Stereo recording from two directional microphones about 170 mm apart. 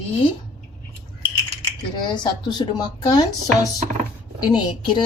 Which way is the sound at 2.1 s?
25° left (ahead or behind).